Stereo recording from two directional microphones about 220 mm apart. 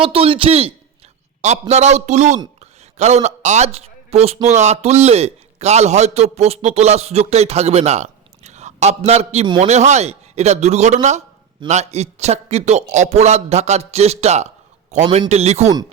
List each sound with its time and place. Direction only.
0.0 s a man's voice: 25° right (ahead or behind)
2.6 s a sound: 30° right (ahead or behind)
3.2 s speech: 30° right (ahead or behind)